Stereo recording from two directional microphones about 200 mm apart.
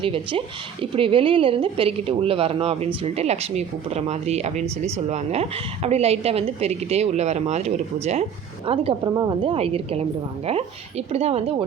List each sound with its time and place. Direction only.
0.0 s a woman's voice: 25° right (ahead or behind)